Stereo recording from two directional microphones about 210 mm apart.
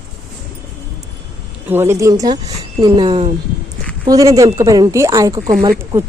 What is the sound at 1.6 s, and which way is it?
Speech, 10° right (ahead or behind).